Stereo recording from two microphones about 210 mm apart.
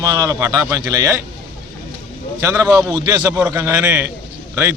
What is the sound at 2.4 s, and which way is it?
A man's voice, 15° right (ahead or behind).